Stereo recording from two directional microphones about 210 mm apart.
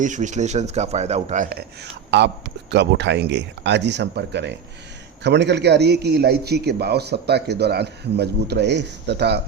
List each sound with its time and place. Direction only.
0.0 s speech: 35° right (ahead or behind)
2.0 s a man's voice: 55° right (ahead or behind)